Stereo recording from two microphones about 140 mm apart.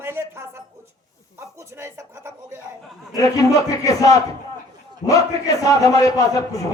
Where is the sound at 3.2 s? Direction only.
25° left (ahead or behind).